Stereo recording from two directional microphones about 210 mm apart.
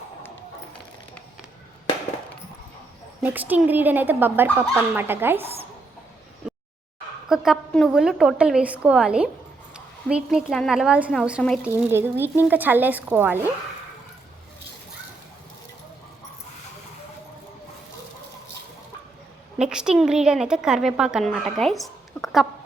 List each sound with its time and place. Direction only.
3.2 s a woman's voice: 10° right (ahead or behind)
6.4 s a sound: 5° right (ahead or behind)
7.3 s a woman's voice: 5° right (ahead or behind)
19.5 s a woman's voice: 5° right (ahead or behind)